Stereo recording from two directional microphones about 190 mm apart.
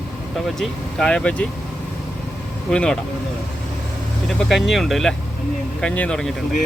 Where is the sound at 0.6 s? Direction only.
5° left (ahead or behind).